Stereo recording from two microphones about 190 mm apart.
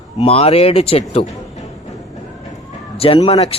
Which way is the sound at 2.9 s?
30° left (ahead or behind).